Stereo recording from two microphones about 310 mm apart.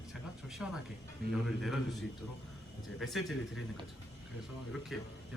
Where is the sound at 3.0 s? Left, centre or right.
Centre.